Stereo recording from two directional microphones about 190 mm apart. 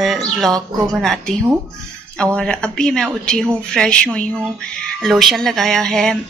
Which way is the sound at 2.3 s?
5° left (ahead or behind).